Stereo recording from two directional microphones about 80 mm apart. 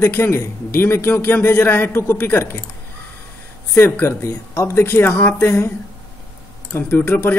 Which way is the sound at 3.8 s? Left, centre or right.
Left.